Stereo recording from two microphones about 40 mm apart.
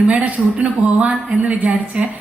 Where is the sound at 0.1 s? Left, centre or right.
Right.